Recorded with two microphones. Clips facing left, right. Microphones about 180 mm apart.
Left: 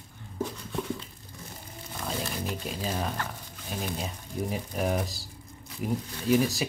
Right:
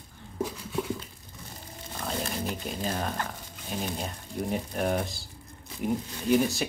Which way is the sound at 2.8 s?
Centre (ahead or behind).